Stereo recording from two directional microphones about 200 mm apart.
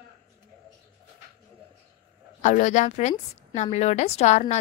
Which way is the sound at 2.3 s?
35° left (ahead or behind).